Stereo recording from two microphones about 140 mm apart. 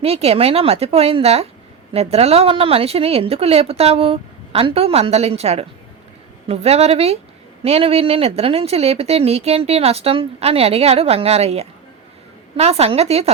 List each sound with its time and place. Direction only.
0.0 s speech: 45° right (ahead or behind)